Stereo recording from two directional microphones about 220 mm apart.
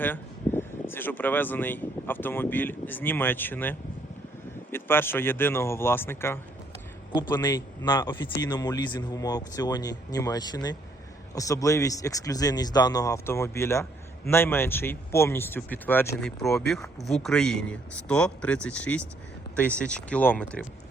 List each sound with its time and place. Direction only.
0.0 s speech: 10° left (ahead or behind)